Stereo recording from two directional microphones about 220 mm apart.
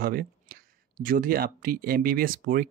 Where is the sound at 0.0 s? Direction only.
40° right (ahead or behind).